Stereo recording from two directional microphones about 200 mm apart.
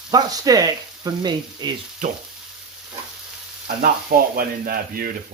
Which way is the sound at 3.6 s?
50° right (ahead or behind).